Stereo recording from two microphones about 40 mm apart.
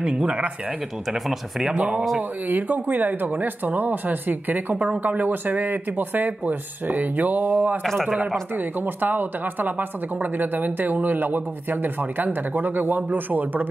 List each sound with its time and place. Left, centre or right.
0.0 s speech: right
1.0 s speech: centre
1.8 s speech: right
2.4 s speech: right
4.7 s speech: right
5.0 s speech: right
7.8 s speech: centre
8.5 s speech: right